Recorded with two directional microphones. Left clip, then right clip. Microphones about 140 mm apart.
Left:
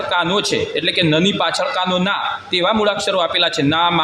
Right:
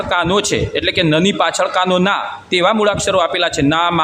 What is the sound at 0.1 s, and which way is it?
A man's voice, 20° right (ahead or behind).